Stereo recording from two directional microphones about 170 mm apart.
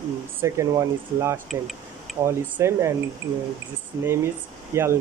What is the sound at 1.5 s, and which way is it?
Tick-tock, centre (ahead or behind).